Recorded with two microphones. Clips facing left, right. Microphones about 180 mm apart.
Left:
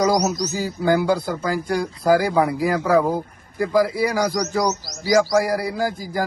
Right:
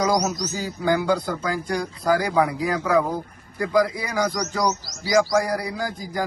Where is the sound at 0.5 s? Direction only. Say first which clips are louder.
Left 3 dB; 10° left (ahead or behind).